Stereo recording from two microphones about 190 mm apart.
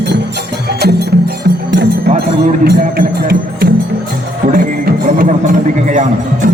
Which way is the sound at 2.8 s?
50° right (ahead or behind).